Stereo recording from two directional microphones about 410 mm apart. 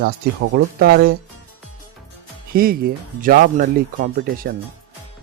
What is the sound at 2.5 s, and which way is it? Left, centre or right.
Speech, right.